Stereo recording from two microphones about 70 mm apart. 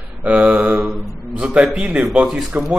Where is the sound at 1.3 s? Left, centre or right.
Centre.